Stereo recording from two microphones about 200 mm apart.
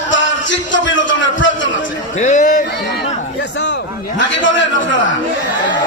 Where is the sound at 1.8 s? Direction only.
40° left (ahead or behind).